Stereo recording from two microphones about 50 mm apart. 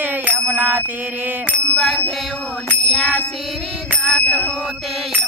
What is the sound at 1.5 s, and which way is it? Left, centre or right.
Bicycle bell, centre.